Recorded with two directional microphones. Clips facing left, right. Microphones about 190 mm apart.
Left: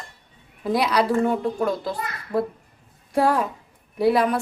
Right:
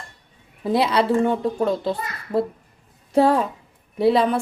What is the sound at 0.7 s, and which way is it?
A child's voice, 25° right (ahead or behind).